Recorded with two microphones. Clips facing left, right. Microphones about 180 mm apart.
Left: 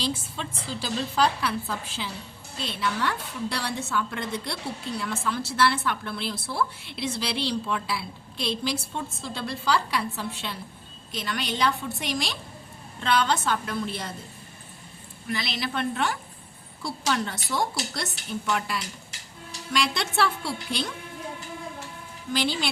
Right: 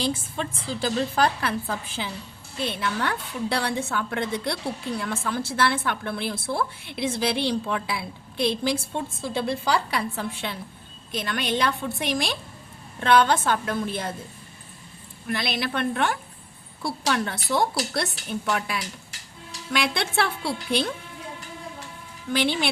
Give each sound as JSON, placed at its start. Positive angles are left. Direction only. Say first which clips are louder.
{"t": 0.0, "sound": "a woman's voice", "louder": "right 3 dB", "side_deg": -50}
{"t": 15.3, "sound": "a woman's voice", "louder": "right 3 dB", "side_deg": -55}
{"t": 22.3, "sound": "a woman's voice", "louder": "right 3 dB", "side_deg": -60}